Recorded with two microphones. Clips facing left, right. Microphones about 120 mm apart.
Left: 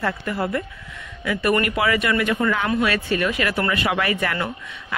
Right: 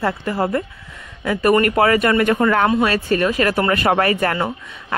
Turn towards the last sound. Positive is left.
turn(degrees=-40)  # may be behind; listen again after turning